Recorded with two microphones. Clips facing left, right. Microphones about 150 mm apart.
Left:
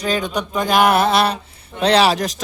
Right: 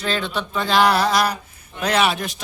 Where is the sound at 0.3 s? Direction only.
15° left (ahead or behind).